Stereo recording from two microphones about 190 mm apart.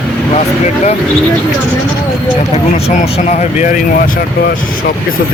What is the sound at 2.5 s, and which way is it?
Speech, 35° left (ahead or behind).